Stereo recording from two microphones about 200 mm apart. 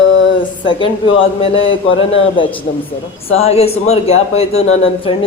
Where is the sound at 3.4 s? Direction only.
30° left (ahead or behind).